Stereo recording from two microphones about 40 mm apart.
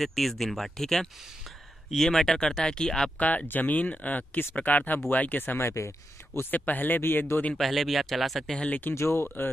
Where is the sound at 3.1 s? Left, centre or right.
Left.